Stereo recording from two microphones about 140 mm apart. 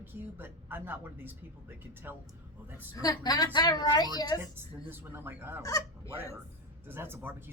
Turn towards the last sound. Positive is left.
turn(degrees=-15)  # may be behind; listen again after turning